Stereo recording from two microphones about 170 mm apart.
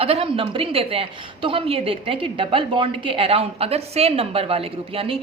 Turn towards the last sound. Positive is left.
turn(degrees=-35)  # may be behind; listen again after turning